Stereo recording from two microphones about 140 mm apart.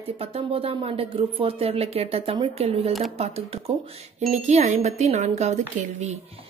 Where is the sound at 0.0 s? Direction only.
45° right (ahead or behind).